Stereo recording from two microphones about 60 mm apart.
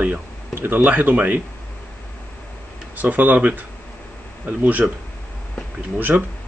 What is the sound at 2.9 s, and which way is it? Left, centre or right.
Speech, right.